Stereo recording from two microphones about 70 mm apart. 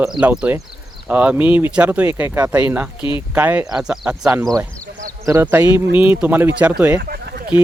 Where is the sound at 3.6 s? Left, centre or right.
Centre.